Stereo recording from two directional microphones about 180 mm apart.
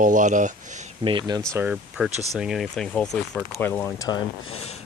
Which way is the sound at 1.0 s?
25° right (ahead or behind).